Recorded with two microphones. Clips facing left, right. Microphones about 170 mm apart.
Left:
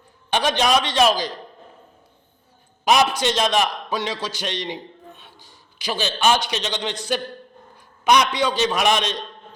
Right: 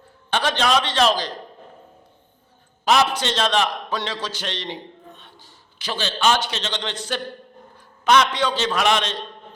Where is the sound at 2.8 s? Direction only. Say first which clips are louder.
Left 1 dB; 15° left (ahead or behind).